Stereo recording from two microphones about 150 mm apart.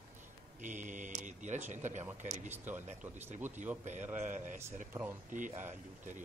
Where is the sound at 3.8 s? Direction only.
50° right (ahead or behind).